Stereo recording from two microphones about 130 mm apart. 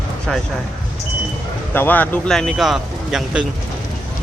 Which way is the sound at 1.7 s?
15° left (ahead or behind).